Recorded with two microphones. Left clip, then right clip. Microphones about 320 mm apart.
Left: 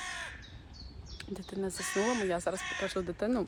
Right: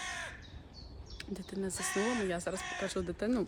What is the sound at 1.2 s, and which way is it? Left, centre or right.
Speech, centre.